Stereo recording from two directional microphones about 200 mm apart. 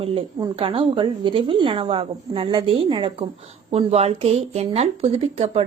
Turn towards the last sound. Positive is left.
turn(degrees=-30)  # may be behind; listen again after turning